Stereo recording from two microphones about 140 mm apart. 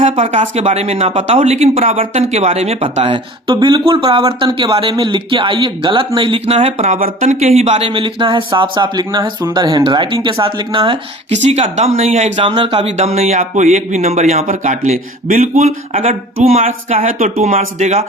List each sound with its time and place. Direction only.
0.0 s speech: 45° right (ahead or behind)
11.3 s speech: 50° right (ahead or behind)
12.4 s speech: 40° right (ahead or behind)
13.4 s speech: 60° right (ahead or behind)
14.4 s speech: 60° right (ahead or behind)
17.5 s speech: 55° right (ahead or behind)